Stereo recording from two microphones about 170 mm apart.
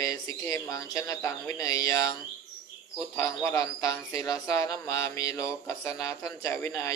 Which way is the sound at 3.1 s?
15° left (ahead or behind).